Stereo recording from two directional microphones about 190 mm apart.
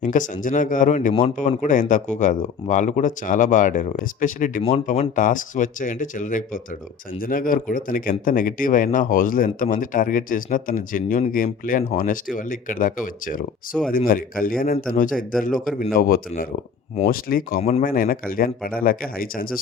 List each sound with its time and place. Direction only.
0.0 s speech: 45° left (ahead or behind)